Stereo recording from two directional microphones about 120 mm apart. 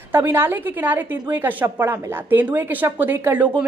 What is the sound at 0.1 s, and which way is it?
A woman's voice, 20° right (ahead or behind).